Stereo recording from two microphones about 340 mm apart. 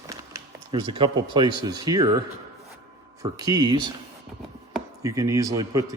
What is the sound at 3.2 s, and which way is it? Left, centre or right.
Speech, centre.